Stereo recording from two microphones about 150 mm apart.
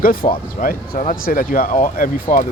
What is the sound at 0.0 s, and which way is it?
Speech, 70° left (ahead or behind).